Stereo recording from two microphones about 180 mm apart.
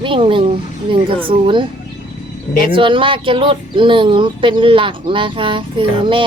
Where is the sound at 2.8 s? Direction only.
30° right (ahead or behind).